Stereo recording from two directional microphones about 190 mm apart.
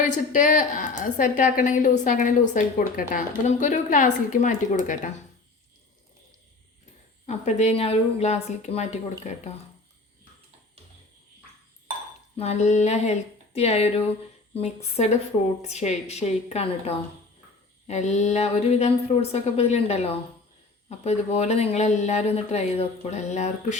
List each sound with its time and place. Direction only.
0.0 s a woman's voice: 40° left (ahead or behind)
7.3 s speech: 35° left (ahead or behind)
12.4 s speech: 35° left (ahead or behind)